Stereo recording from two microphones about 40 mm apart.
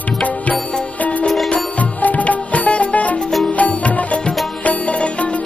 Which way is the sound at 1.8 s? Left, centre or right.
Left.